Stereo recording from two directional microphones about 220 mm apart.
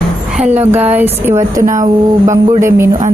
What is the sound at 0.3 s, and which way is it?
A woman's voice, 5° right (ahead or behind).